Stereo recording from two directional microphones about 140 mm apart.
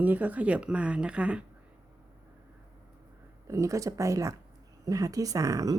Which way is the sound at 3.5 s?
20° right (ahead or behind).